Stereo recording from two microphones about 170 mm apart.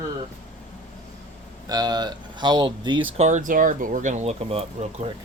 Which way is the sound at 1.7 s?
25° right (ahead or behind).